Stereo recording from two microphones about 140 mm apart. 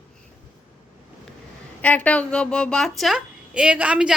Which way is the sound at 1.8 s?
10° left (ahead or behind).